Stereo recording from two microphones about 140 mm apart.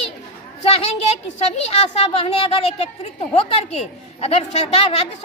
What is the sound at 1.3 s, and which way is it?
A woman's voice, 45° left (ahead or behind).